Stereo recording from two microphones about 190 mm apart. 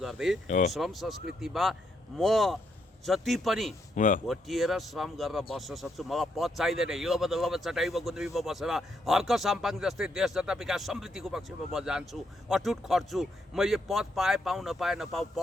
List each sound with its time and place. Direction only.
0.0 s speech: centre (ahead or behind)
0.4 s speech: 40° left (ahead or behind)
0.7 s speech: centre (ahead or behind)
3.9 s speech: 40° left (ahead or behind)
4.3 s speech: centre (ahead or behind)